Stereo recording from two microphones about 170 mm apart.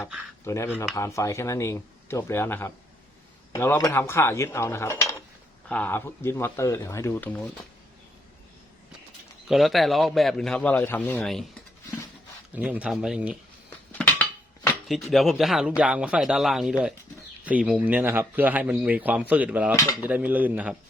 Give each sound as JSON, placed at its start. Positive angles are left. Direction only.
{"t": 0.4, "sound": "speech", "side_deg": 15}
{"t": 9.5, "sound": "speech", "side_deg": 0}
{"t": 12.5, "sound": "speech", "side_deg": -10}
{"t": 14.8, "sound": "speech", "side_deg": 0}